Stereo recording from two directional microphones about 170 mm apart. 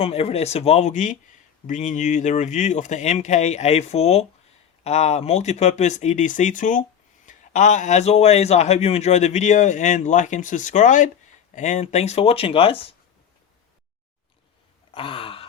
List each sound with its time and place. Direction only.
0.0 s a man's voice: 35° left (ahead or behind)
14.9 s sigh: 30° left (ahead or behind)